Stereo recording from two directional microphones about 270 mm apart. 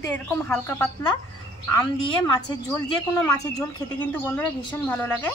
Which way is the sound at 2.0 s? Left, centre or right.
Centre.